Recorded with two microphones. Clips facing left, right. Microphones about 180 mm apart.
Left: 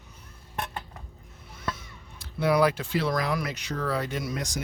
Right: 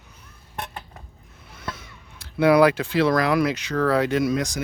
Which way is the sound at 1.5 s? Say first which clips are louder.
Even; 75° right (ahead or behind).